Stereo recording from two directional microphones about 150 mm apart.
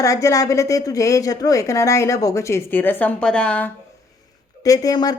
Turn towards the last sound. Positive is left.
turn(degrees=25)  # may be behind; listen again after turning